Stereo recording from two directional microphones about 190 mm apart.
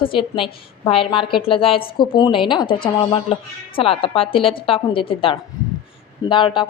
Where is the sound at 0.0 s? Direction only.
30° left (ahead or behind).